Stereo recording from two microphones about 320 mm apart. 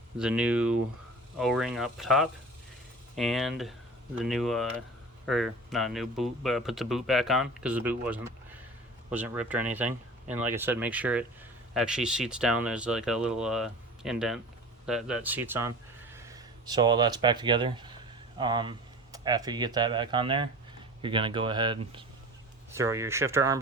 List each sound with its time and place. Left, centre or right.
0.2 s speech: centre